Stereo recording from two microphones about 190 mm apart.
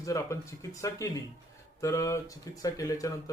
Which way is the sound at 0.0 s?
15° left (ahead or behind).